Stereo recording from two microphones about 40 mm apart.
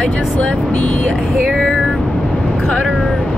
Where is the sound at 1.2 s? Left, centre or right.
Centre.